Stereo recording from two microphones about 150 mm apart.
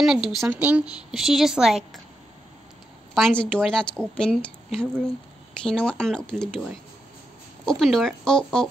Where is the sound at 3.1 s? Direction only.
5° left (ahead or behind).